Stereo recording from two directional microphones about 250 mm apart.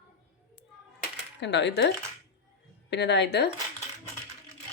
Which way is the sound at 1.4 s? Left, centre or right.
Left.